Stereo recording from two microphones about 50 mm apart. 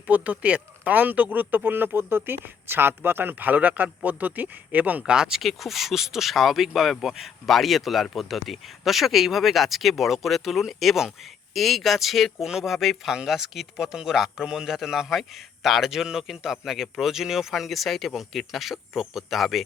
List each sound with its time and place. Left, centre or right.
0.1 s speech: right
5.0 s speech: centre
5.4 s speech: centre
12.7 s speech: centre